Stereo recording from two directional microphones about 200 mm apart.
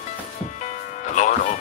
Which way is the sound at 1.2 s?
40° left (ahead or behind).